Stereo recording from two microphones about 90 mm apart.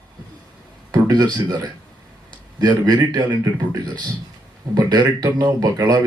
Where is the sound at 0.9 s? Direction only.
50° right (ahead or behind).